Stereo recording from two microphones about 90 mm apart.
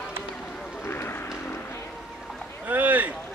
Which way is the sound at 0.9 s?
25° left (ahead or behind).